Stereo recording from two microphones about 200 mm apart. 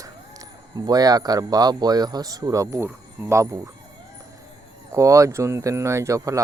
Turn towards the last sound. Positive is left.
turn(degrees=-15)  # may be behind; listen again after turning